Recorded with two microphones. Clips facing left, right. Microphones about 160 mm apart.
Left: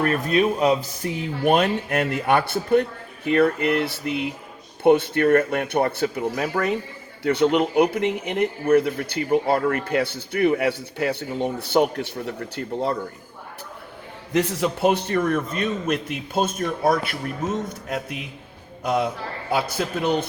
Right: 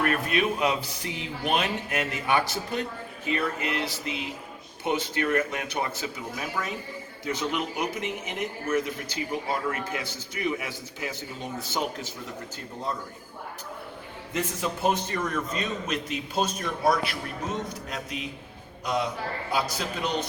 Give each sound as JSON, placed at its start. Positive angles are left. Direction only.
{"t": 0.0, "sound": "a man's voice", "side_deg": 35}
{"t": 14.3, "sound": "a man's voice", "side_deg": 75}
{"t": 18.8, "sound": "a man's voice", "side_deg": 55}